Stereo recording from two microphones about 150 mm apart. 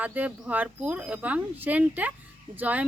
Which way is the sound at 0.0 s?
10° right (ahead or behind).